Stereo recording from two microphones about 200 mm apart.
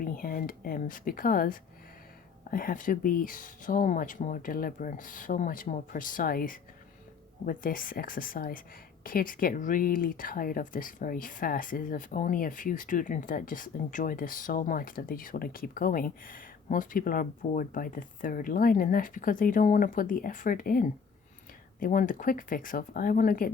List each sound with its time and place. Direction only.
0.0 s speech: 45° left (ahead or behind)